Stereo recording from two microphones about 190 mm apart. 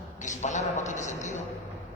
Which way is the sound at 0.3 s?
40° left (ahead or behind).